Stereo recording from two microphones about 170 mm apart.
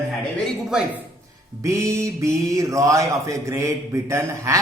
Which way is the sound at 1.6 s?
15° right (ahead or behind).